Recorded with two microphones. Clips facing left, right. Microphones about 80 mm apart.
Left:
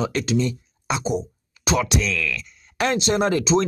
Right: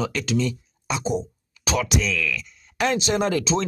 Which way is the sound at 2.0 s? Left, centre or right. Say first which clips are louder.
Even; left.